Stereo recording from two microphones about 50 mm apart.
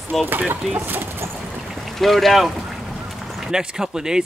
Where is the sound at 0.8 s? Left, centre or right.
Right.